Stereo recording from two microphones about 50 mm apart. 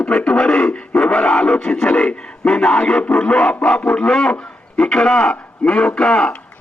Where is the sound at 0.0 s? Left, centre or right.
Centre.